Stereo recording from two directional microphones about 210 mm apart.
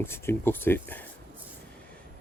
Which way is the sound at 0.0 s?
10° left (ahead or behind).